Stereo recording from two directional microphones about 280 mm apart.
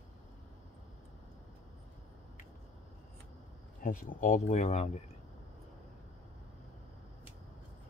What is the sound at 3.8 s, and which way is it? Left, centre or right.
Speech, left.